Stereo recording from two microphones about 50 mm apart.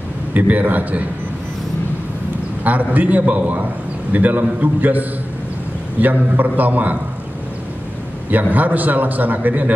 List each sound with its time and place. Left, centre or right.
0.3 s a man's voice: right
2.6 s a man's voice: right
8.3 s a man's voice: right